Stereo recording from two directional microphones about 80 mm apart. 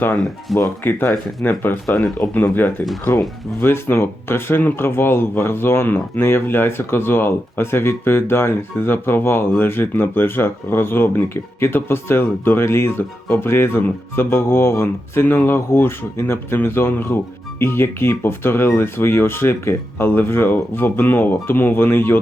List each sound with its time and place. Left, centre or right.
0.5 s speech: centre
0.9 s speech: left